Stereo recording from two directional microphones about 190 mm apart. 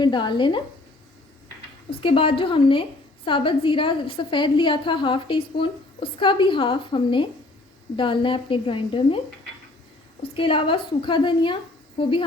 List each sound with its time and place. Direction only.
0.0 s a woman's voice: 25° left (ahead or behind)
2.0 s a woman's voice: 30° left (ahead or behind)
10.3 s a woman's voice: 30° left (ahead or behind)